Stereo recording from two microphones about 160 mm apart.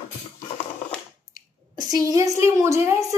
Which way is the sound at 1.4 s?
55° left (ahead or behind).